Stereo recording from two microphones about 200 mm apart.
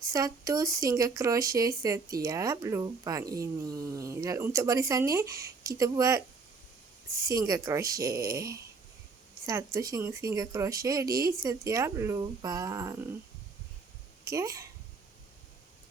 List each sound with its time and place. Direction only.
0.1 s speech: 15° right (ahead or behind)
7.3 s speech: 20° right (ahead or behind)
9.5 s speech: 15° right (ahead or behind)
14.3 s speech: 15° right (ahead or behind)